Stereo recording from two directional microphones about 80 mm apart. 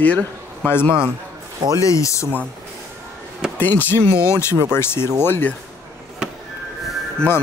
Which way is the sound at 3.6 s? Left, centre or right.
Left.